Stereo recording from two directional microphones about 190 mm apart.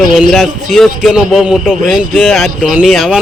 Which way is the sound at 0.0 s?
Centre (ahead or behind).